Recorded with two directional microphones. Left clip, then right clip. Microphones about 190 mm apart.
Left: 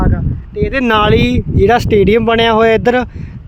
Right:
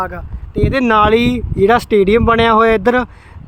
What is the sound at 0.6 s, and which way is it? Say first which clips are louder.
Speech: even; 40° right (ahead or behind).